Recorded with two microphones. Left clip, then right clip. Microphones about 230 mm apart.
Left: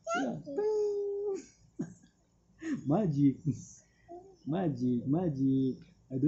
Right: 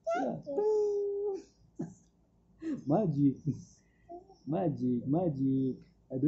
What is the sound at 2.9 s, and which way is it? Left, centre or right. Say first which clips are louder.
Speech: even; left.